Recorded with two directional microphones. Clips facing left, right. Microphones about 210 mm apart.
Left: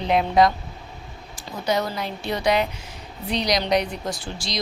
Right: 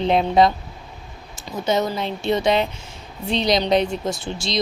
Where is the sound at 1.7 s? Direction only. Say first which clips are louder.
Right 3 dB; 25° right (ahead or behind).